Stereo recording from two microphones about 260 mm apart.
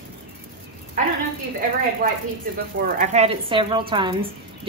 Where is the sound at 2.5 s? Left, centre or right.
Right.